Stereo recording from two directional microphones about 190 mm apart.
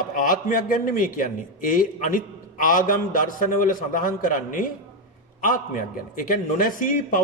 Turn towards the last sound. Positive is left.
turn(degrees=45)  # may be behind; listen again after turning